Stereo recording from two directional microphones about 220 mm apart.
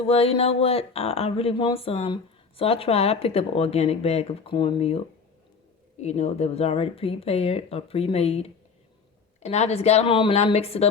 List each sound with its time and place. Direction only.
0.0 s speech: 25° left (ahead or behind)
6.0 s speech: 30° left (ahead or behind)